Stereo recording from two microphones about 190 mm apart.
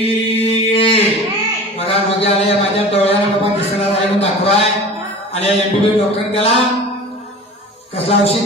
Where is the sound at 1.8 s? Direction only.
30° left (ahead or behind).